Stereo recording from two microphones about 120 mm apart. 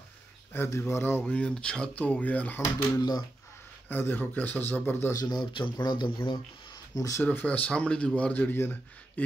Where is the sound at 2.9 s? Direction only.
35° left (ahead or behind).